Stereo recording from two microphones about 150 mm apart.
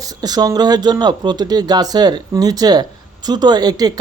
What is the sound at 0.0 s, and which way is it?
Speech, 25° right (ahead or behind).